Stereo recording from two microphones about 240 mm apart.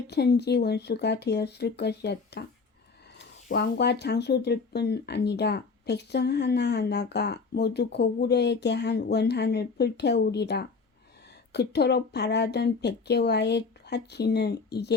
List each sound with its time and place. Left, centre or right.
0.1 s speech: left
3.5 s speech: left